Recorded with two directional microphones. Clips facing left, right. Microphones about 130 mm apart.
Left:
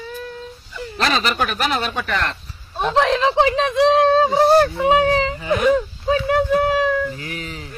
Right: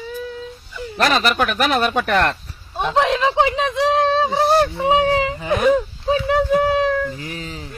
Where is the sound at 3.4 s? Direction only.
20° right (ahead or behind).